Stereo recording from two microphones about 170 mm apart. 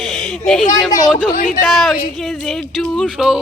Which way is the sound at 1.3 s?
55° left (ahead or behind).